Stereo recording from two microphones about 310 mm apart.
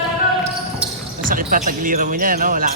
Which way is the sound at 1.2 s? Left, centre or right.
Right.